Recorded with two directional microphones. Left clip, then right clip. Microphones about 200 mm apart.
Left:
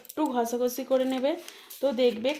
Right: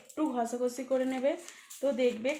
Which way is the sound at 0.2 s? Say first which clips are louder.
Left 5 dB; 45° left (ahead or behind).